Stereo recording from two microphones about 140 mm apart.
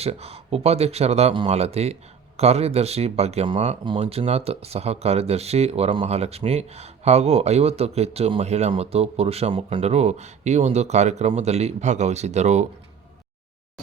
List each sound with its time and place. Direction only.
0.0 s speech: 45° right (ahead or behind)